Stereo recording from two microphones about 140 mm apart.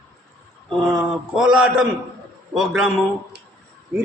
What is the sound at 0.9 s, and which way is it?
A man's voice, 5° right (ahead or behind).